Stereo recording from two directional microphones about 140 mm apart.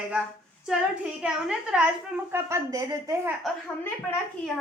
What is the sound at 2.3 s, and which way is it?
A woman's voice, 20° right (ahead or behind).